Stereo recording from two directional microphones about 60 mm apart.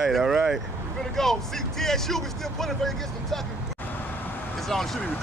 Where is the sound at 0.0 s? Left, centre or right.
Centre.